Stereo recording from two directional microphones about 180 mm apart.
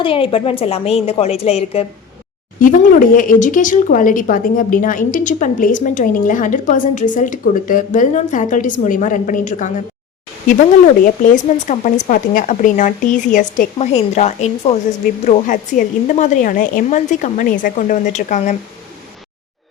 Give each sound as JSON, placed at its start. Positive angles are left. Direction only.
{"t": 0.0, "sound": "a woman's voice", "side_deg": 30}
{"t": 2.6, "sound": "speech", "side_deg": 50}
{"t": 11.0, "sound": "a woman's voice", "side_deg": 45}